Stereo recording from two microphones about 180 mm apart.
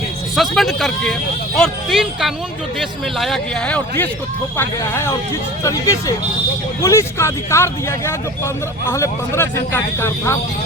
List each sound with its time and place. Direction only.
0.3 s speech: centre (ahead or behind)